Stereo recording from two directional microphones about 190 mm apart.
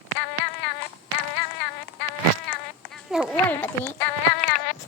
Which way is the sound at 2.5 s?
5° left (ahead or behind).